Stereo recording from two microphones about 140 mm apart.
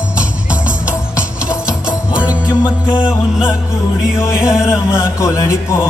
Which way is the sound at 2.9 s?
5° right (ahead or behind).